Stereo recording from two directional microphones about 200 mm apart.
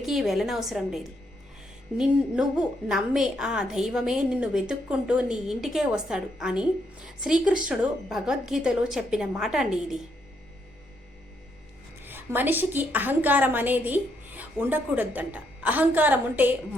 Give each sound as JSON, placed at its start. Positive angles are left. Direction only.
{"t": 0.0, "sound": "a woman's voice", "side_deg": 0}
{"t": 12.0, "sound": "a woman's voice", "side_deg": -10}